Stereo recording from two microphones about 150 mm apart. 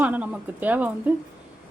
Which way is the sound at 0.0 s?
10° right (ahead or behind).